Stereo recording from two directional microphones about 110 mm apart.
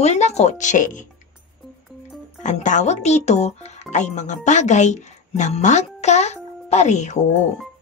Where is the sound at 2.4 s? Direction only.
90° left.